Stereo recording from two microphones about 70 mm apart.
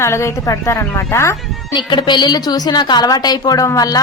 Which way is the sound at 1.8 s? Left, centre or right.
Left.